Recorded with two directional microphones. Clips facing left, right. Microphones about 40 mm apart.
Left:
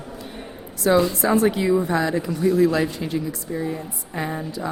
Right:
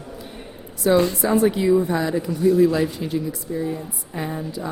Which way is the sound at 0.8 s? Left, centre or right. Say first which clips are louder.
Even; left.